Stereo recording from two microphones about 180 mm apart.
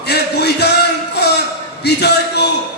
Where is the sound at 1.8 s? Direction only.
65° left (ahead or behind).